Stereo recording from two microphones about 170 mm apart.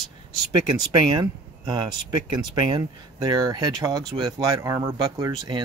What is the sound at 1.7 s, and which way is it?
Speech, 25° right (ahead or behind).